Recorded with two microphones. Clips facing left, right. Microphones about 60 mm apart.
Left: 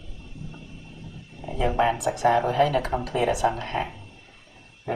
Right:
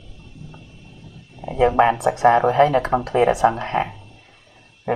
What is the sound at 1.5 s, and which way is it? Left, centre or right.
Speech, right.